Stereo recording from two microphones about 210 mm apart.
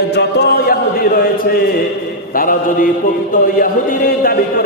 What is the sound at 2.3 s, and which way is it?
A man's voice, 40° left (ahead or behind).